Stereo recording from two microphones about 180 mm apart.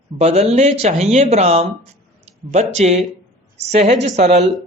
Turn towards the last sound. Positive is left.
turn(degrees=-40)  # may be behind; listen again after turning